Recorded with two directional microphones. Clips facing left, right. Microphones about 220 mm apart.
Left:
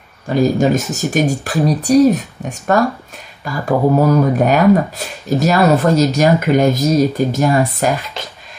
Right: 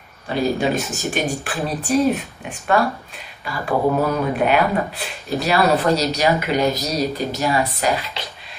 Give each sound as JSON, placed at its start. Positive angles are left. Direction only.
{"t": 0.3, "sound": "speech", "side_deg": 45}